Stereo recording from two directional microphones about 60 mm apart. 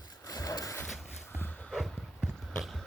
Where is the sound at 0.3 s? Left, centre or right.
Left.